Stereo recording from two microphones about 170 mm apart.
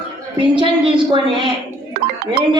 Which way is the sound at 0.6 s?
30° right (ahead or behind).